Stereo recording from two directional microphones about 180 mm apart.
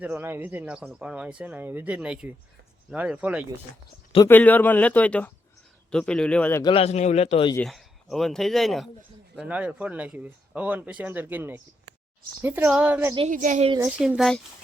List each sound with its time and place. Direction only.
0.0 s speech: 10° right (ahead or behind)
4.3 s a man's voice: 10° left (ahead or behind)
6.6 s speech: 30° left (ahead or behind)
7.5 s speech: centre (ahead or behind)
13.3 s a woman's voice: 45° right (ahead or behind)
13.7 s speech: 10° right (ahead or behind)